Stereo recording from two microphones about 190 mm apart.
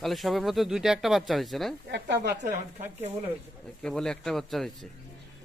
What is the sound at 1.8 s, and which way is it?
Speech, 65° right (ahead or behind).